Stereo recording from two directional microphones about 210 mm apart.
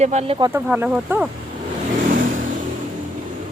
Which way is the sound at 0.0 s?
30° right (ahead or behind).